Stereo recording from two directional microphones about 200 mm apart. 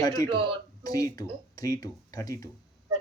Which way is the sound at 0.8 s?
20° left (ahead or behind).